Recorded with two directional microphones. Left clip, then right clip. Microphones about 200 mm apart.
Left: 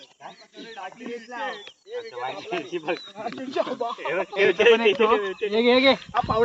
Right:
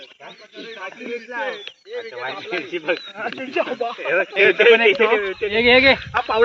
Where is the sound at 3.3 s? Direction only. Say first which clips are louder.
Right 4 dB; 55° left (ahead or behind).